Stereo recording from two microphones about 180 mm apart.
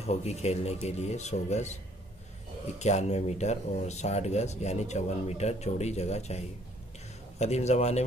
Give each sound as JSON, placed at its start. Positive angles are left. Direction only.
{"t": 0.0, "sound": "speech", "side_deg": 35}
{"t": 2.8, "sound": "speech", "side_deg": 40}